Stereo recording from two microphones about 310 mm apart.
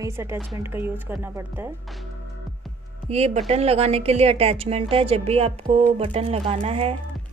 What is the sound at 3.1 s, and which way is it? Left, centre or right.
Speech, right.